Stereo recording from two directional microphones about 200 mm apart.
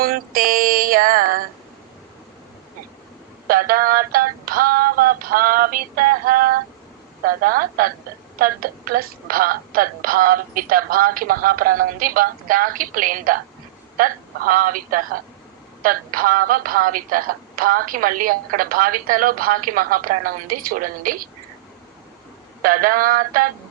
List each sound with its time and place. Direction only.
0.0 s speech: 45° right (ahead or behind)
3.4 s speech: 45° right (ahead or behind)
22.6 s speech: 45° right (ahead or behind)